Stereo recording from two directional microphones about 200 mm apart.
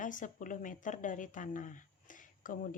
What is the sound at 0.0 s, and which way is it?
Speech, 40° left (ahead or behind).